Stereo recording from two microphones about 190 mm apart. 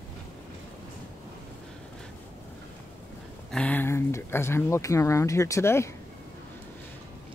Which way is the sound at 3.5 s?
5° left (ahead or behind).